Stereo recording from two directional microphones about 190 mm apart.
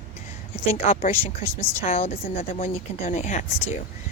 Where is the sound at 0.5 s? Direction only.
30° left (ahead or behind).